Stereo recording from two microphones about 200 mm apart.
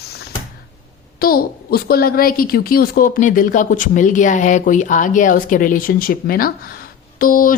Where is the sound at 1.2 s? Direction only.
50° left (ahead or behind).